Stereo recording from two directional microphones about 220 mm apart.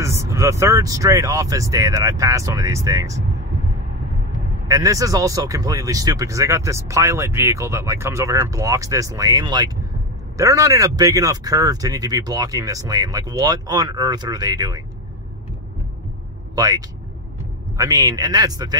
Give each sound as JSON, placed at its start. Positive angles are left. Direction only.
{"t": 0.0, "sound": "speech", "side_deg": -15}
{"t": 4.6, "sound": "speech", "side_deg": -15}
{"t": 16.5, "sound": "speech", "side_deg": -15}